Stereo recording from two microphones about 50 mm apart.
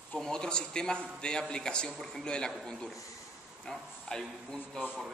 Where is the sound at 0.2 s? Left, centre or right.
Centre.